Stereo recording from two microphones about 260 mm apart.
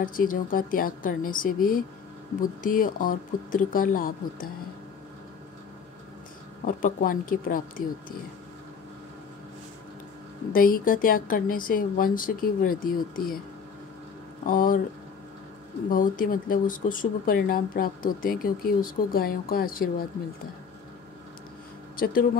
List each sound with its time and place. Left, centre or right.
0.0 s speech: left
6.6 s speech: left
10.5 s speech: left
14.4 s speech: left
15.9 s speech: left
21.9 s speech: left